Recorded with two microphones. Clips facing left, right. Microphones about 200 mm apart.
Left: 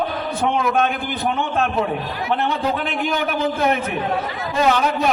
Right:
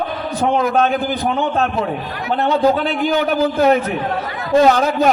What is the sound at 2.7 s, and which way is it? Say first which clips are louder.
A man's voice: right 5 dB; 35° right (ahead or behind).